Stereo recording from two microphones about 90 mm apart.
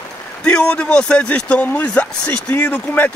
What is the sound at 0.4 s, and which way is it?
Speech, 10° left (ahead or behind).